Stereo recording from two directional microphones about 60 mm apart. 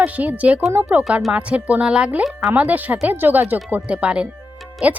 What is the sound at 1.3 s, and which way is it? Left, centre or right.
Speech, right.